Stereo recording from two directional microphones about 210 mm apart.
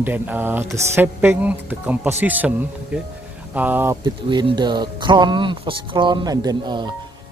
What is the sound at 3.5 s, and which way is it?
Speech, 10° right (ahead or behind).